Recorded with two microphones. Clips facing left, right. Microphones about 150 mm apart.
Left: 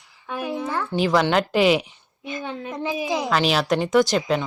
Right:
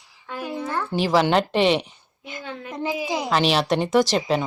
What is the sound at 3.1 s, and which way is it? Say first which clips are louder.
A child's voice: even; centre (ahead or behind).